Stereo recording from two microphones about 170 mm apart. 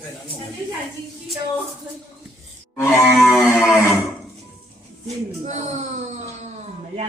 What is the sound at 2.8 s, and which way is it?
Cattle, 15° left (ahead or behind).